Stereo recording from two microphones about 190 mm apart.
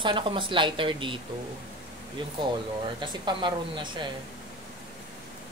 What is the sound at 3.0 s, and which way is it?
Speech, 25° right (ahead or behind).